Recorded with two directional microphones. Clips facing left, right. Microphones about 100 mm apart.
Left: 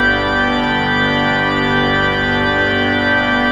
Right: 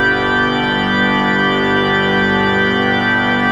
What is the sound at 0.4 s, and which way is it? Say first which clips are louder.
Organ: even; 15° right (ahead or behind).